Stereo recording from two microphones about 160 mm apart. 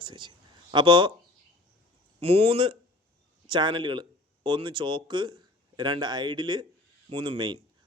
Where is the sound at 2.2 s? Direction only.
35° right (ahead or behind).